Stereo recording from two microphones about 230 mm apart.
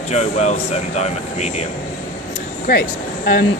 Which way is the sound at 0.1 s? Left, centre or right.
Left.